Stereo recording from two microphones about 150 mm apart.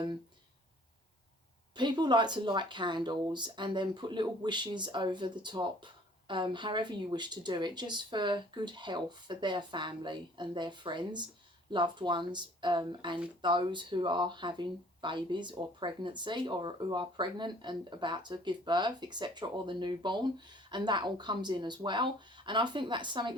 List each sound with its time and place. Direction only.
1.7 s speech: 30° right (ahead or behind)